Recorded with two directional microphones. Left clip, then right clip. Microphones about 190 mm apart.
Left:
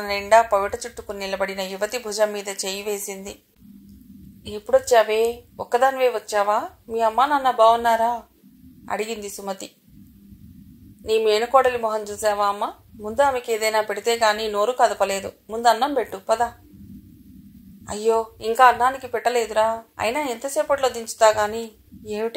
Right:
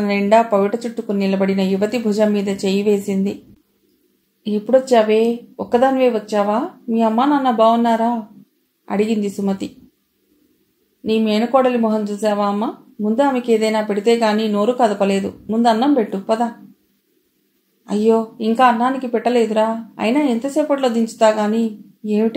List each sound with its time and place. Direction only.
0.0 s speech: 30° left (ahead or behind)
4.5 s speech: 30° left (ahead or behind)
11.1 s speech: 35° left (ahead or behind)
17.8 s a woman's voice: 35° left (ahead or behind)